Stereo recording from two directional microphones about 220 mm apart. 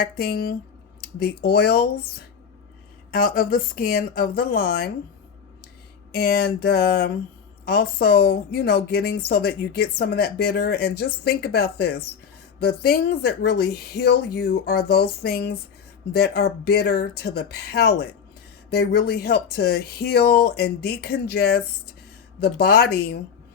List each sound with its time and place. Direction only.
0.0 s a woman's voice: 45° left (ahead or behind)
3.1 s speech: 40° left (ahead or behind)
6.1 s a woman's voice: 45° left (ahead or behind)